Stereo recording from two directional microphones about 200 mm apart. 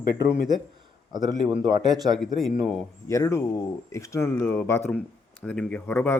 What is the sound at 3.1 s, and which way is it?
Speech, 15° left (ahead or behind).